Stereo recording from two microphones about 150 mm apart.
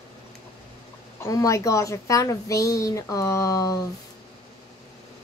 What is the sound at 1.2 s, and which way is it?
Speech, 20° left (ahead or behind).